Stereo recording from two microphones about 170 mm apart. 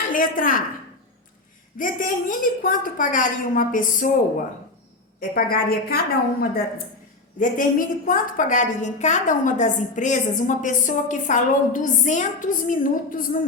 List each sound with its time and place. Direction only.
0.1 s a woman's voice: 55° left (ahead or behind)
1.8 s a woman's voice: 50° left (ahead or behind)